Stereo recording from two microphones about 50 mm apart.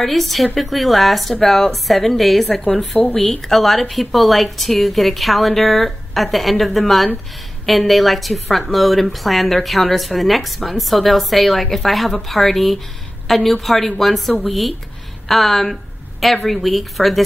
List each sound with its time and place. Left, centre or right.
0.0 s a woman's voice: centre
2.5 s a woman's voice: left
3.4 s a woman's voice: centre
15.2 s a sound: centre
16.4 s a woman's voice: centre